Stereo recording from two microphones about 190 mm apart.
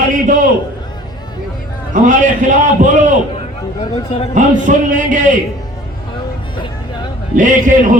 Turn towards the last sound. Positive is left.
turn(degrees=-45)  # may be behind; listen again after turning